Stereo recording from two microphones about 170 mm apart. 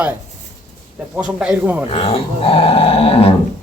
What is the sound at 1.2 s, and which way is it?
Speech, 5° right (ahead or behind).